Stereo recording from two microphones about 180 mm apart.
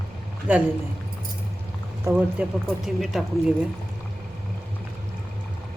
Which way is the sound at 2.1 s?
15° right (ahead or behind).